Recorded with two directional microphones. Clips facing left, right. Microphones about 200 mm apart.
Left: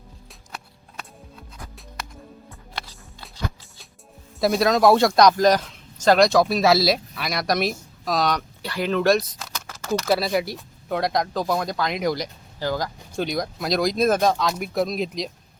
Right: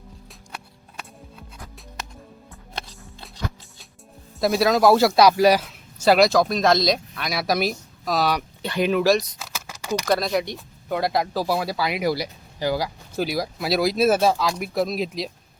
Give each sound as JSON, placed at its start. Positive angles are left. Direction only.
{"t": 0.3, "sound": "music", "side_deg": -10}
{"t": 4.4, "sound": "speech", "side_deg": 0}
{"t": 8.6, "sound": "speech", "side_deg": -20}
{"t": 9.0, "sound": "a sound", "side_deg": -5}
{"t": 10.1, "sound": "speech", "side_deg": 5}